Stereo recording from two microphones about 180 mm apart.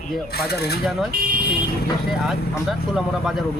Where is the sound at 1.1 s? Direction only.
50° right (ahead or behind).